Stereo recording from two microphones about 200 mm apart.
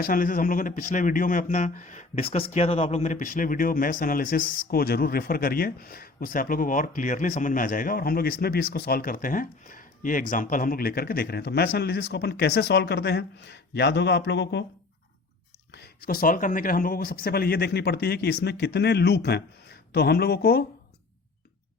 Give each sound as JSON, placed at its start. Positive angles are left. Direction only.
{"t": 0.0, "sound": "speech", "side_deg": 45}
{"t": 15.7, "sound": "speech", "side_deg": 50}